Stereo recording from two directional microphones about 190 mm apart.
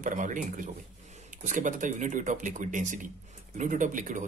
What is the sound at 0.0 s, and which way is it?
A man's voice, 40° right (ahead or behind).